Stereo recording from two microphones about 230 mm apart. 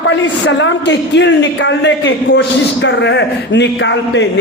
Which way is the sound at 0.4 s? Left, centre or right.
Left.